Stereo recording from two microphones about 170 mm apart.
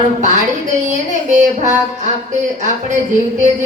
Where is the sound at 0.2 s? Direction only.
45° right (ahead or behind).